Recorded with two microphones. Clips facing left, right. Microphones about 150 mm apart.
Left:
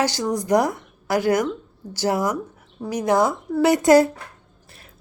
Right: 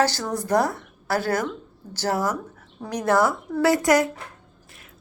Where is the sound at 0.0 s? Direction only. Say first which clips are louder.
Left 1 dB; 15° left (ahead or behind).